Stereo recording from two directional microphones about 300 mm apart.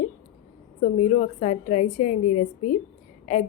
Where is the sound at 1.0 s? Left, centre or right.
Left.